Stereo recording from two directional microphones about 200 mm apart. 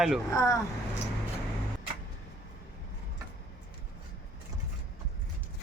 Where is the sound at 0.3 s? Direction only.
15° left (ahead or behind).